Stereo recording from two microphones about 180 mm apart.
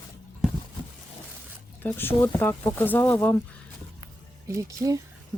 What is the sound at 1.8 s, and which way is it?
Speech, 10° left (ahead or behind).